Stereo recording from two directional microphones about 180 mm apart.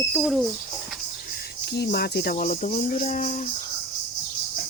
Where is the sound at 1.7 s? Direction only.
65° left (ahead or behind); by 3.5 s 45° left (ahead or behind).